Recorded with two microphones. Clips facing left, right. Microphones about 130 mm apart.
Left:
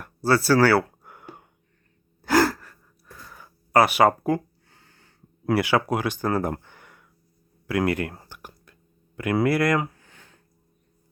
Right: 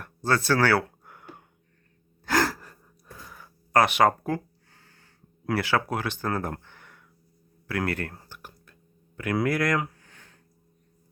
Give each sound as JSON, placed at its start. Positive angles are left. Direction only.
{"t": 0.0, "sound": "a sound", "side_deg": 5}
{"t": 2.2, "sound": "gasp", "side_deg": 5}
{"t": 2.6, "sound": "gasp", "side_deg": -15}
{"t": 3.2, "sound": "a sound", "side_deg": 5}
{"t": 5.5, "sound": "speech", "side_deg": 10}
{"t": 9.1, "sound": "speech", "side_deg": 5}